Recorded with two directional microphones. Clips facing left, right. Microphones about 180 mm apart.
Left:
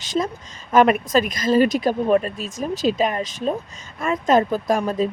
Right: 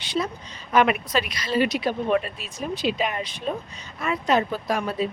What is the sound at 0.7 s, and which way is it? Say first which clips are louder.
Speech: left 5 dB; 45° left (ahead or behind).